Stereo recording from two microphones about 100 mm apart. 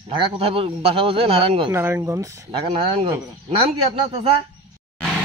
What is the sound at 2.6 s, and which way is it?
Speech, 55° right (ahead or behind).